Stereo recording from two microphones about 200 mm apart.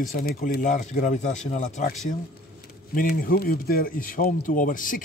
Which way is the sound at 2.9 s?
45° left (ahead or behind).